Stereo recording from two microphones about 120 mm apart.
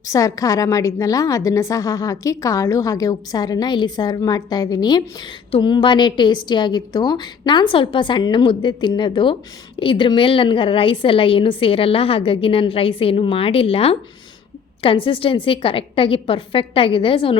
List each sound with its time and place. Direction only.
0.1 s a woman's voice: 30° left (ahead or behind); by 17.3 s 50° left (ahead or behind)